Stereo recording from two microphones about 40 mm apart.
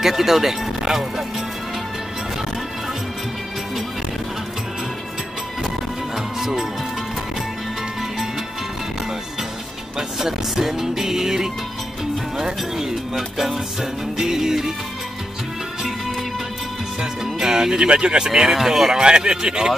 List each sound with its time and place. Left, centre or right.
0.0 s speech: centre
6.1 s music: centre
9.9 s speech: centre
17.0 s speech: centre
18.9 s speech: centre